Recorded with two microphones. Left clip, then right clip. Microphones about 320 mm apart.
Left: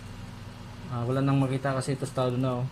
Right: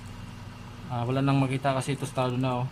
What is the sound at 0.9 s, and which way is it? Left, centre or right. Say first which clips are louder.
Speech: right 1 dB; centre.